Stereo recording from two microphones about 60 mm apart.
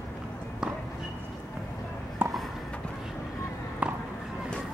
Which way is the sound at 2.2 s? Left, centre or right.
Right.